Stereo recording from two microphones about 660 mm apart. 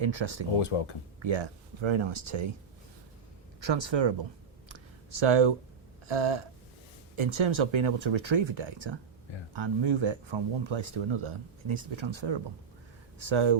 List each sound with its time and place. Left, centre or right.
0.0 s speech: right
3.6 s speech: right
4.7 s a sound: right
6.1 s speech: right